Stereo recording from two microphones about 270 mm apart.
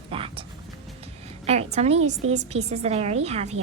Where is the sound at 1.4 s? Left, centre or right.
Right.